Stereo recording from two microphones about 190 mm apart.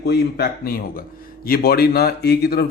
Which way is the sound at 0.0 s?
60° left (ahead or behind).